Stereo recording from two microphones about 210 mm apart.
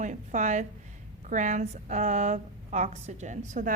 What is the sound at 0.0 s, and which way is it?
A woman's voice, 35° right (ahead or behind).